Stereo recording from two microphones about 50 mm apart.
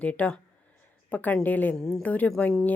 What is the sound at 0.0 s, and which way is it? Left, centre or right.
Speech, left.